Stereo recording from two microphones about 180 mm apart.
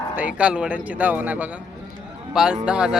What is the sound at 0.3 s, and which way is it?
A man's voice, 5° right (ahead or behind).